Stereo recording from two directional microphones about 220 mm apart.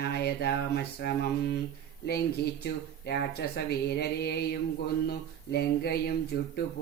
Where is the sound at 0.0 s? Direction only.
45° left (ahead or behind).